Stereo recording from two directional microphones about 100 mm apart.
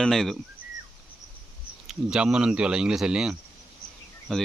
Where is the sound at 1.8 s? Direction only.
5° right (ahead or behind).